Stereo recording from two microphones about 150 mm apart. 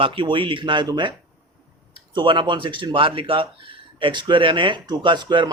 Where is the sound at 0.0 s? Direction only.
35° right (ahead or behind).